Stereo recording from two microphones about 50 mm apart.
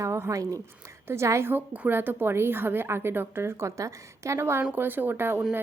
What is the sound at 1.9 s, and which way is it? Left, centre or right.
A woman's voice, right.